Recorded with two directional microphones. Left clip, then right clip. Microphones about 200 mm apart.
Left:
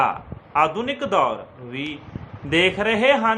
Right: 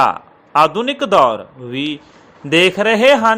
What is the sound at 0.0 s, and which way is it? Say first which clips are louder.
A man's voice: right 7 dB; 35° right (ahead or behind).